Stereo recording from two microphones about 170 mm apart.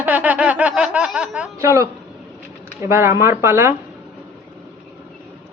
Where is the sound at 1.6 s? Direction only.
15° right (ahead or behind).